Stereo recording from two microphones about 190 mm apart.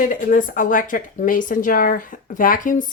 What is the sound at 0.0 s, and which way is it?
Speech, 45° left (ahead or behind).